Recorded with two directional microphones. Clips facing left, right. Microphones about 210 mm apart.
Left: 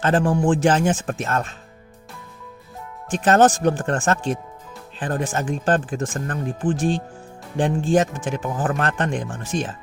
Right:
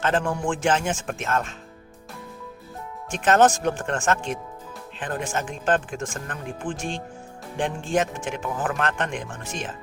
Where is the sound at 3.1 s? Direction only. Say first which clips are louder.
Left 3 dB; 35° left (ahead or behind).